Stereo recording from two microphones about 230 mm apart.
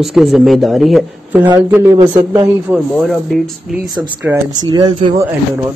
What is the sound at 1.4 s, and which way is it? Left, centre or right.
Speech, centre.